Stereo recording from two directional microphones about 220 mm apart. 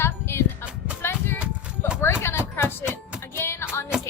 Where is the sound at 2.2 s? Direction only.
10° left (ahead or behind).